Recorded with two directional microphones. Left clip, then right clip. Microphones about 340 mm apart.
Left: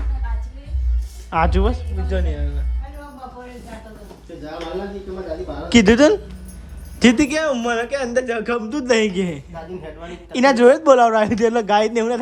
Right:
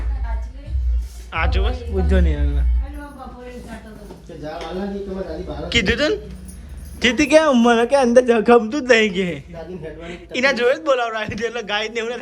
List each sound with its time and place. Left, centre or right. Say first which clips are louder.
1.3 s a man's voice: left 4 dB; centre
5.7 s a man's voice: left 5 dB; centre
7.4 s a man's voice: right 5 dB; centre